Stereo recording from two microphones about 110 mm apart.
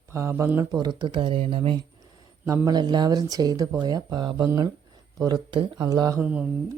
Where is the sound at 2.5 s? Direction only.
40° right (ahead or behind).